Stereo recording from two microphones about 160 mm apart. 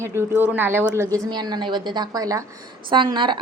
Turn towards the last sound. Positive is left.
turn(degrees=-30)  # may be behind; listen again after turning